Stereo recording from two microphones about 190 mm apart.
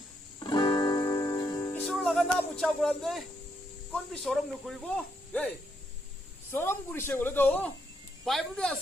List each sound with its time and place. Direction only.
0.3 s music: 25° left (ahead or behind)
1.9 s a man's voice: centre (ahead or behind)